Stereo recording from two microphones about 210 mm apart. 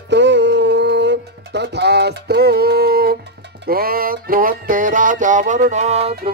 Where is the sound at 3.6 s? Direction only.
45° right (ahead or behind); by 6.3 s 30° right (ahead or behind).